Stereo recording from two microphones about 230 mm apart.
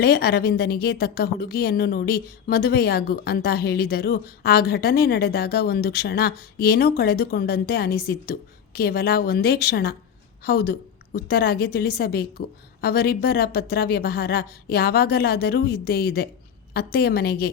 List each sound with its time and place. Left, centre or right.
0.0 s a woman's voice: left